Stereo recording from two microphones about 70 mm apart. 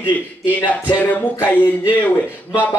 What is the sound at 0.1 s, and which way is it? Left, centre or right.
Speech, left.